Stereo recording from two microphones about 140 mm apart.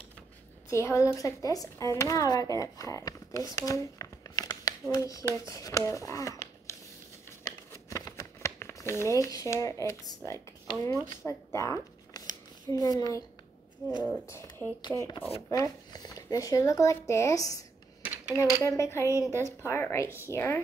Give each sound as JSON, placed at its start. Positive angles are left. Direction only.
{"t": 0.7, "sound": "speech", "side_deg": 20}
{"t": 7.2, "sound": "a sound", "side_deg": 20}
{"t": 13.8, "sound": "speech", "side_deg": 20}
{"t": 14.8, "sound": "speech", "side_deg": 30}
{"t": 18.0, "sound": "a sound", "side_deg": -10}
{"t": 18.6, "sound": "speech", "side_deg": 20}